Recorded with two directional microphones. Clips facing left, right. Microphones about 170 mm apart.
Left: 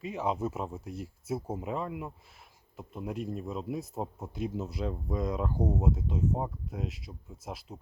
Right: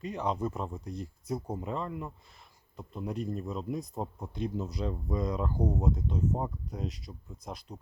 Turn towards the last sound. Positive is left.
turn(degrees=5)  # may be behind; listen again after turning